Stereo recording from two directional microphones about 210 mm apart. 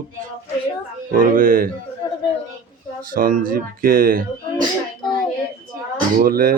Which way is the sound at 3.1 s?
40° right (ahead or behind).